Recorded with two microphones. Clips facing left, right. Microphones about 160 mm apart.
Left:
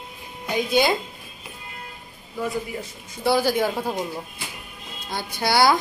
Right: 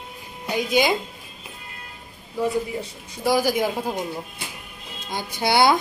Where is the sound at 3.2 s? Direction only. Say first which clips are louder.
Even; 10° right (ahead or behind).